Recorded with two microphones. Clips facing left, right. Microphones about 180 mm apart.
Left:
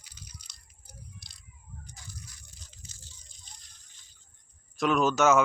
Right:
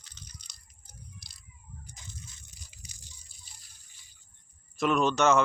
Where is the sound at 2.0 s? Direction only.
25° right (ahead or behind).